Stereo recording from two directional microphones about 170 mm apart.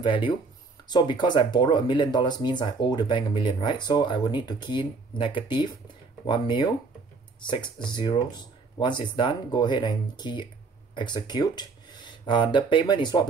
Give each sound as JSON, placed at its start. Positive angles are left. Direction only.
{"t": 0.0, "sound": "speech", "side_deg": 30}